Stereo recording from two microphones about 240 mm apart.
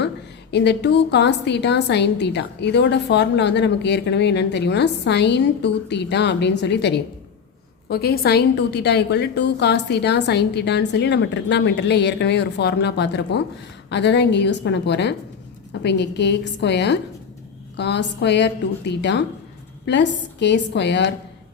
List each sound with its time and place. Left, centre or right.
0.5 s a woman's voice: left